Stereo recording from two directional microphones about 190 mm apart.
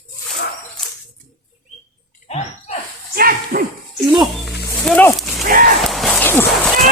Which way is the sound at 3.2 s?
50° right (ahead or behind).